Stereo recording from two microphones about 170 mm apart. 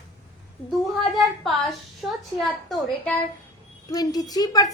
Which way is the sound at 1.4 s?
Centre (ahead or behind).